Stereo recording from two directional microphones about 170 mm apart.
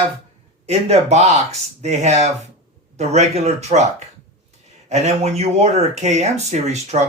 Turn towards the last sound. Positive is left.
turn(degrees=-40)  # may be behind; listen again after turning